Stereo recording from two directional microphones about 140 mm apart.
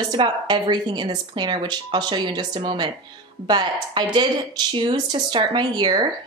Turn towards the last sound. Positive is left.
turn(degrees=-30)  # may be behind; listen again after turning